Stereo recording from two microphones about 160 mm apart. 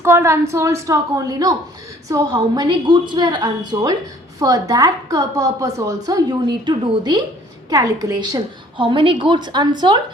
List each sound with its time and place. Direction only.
0.0 s a woman's voice: 15° right (ahead or behind)
8.8 s a woman's voice: 30° right (ahead or behind)